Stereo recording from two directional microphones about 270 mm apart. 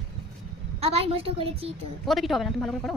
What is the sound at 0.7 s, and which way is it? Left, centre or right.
Speech, right.